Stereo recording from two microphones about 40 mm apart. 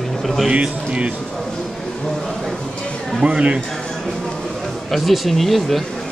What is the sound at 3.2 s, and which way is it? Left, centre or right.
Speech, right.